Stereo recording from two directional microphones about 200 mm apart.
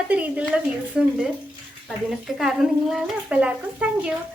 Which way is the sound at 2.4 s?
Centre (ahead or behind).